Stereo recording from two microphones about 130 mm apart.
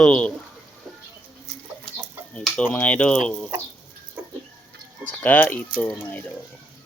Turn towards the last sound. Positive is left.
turn(degrees=10)  # may be behind; listen again after turning